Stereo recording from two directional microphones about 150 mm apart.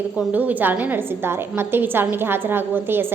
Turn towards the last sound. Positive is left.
turn(degrees=-15)  # may be behind; listen again after turning